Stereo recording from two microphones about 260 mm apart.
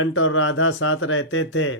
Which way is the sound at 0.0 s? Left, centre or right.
Left.